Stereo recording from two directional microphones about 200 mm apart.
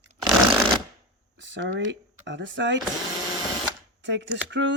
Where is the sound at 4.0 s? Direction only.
60° right (ahead or behind).